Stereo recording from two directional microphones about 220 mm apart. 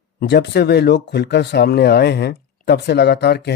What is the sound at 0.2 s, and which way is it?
Speech, 50° left (ahead or behind).